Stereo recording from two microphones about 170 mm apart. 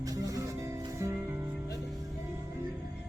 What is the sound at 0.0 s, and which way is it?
Music, 20° right (ahead or behind).